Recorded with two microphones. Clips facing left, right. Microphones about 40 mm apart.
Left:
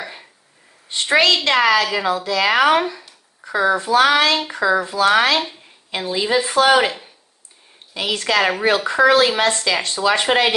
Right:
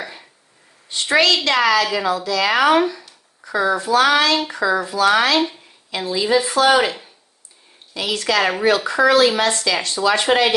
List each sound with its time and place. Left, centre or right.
1.1 s a woman's voice: left